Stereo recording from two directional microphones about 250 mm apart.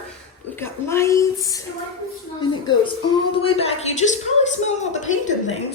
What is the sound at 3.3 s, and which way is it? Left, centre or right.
Speech, left.